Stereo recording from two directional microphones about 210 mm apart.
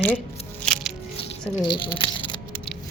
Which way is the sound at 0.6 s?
5° left (ahead or behind).